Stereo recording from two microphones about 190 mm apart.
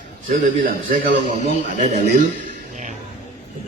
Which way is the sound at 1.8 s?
50° right (ahead or behind).